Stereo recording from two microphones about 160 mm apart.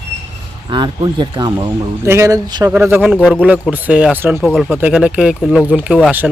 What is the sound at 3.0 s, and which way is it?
Speech, 5° left (ahead or behind).